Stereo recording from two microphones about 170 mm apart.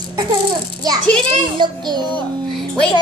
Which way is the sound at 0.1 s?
25° right (ahead or behind).